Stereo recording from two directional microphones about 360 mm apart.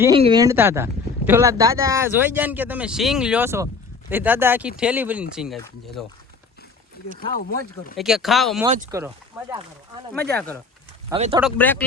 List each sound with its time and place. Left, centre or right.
0.0 s speech: centre
7.9 s speech: centre
8.6 s speech: centre
8.9 s speech: centre
10.1 s speech: centre
11.1 s speech: centre
11.3 s speech: centre